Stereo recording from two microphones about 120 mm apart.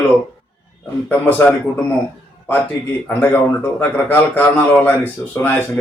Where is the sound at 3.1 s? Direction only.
15° left (ahead or behind).